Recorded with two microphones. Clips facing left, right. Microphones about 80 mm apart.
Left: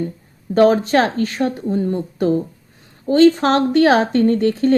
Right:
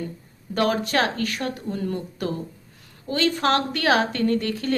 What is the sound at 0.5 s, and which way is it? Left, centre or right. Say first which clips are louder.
A woman's voice: left 9 dB; left.